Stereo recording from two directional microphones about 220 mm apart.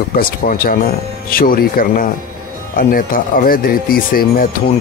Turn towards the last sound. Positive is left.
turn(degrees=40)  # may be behind; listen again after turning